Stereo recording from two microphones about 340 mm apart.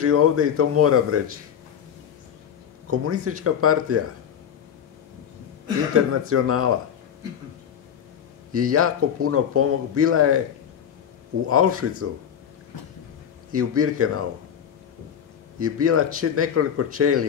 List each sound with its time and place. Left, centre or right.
0.0 s speech: right
2.9 s speech: right
6.2 s speech: right
8.5 s speech: right
11.4 s speech: right
13.5 s speech: right
15.6 s speech: right